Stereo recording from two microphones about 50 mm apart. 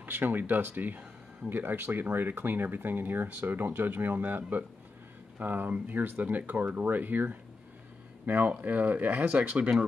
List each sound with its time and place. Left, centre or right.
0.0 s speech: right
8.5 s speech: right